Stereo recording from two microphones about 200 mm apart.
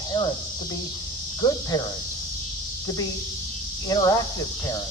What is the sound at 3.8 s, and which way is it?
Speech, 15° left (ahead or behind).